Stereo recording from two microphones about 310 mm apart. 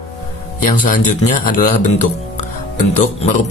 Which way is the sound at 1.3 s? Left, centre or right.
Left.